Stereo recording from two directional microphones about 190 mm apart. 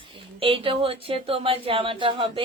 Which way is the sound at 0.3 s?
30° right (ahead or behind).